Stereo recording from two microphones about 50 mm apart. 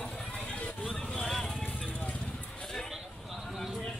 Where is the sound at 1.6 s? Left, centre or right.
Left.